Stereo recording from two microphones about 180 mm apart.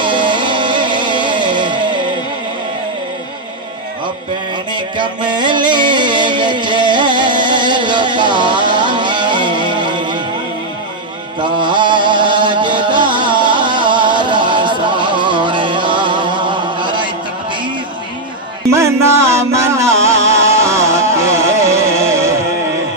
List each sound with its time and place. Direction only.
0.0 s music: 25° right (ahead or behind)
4.7 s music: 25° right (ahead or behind)
11.4 s music: 25° right (ahead or behind)
18.7 s music: 15° right (ahead or behind)